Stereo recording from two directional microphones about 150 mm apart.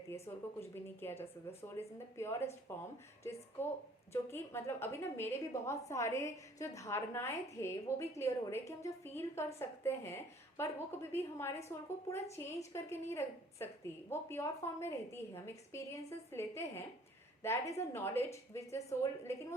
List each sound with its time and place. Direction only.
0.3 s a woman's voice: 15° left (ahead or behind)
4.1 s a woman's voice: 15° left (ahead or behind)